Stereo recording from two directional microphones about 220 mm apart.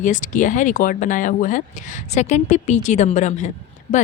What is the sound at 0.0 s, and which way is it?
Speech, 35° left (ahead or behind).